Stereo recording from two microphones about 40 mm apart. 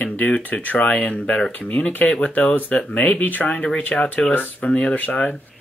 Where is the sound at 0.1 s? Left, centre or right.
Left.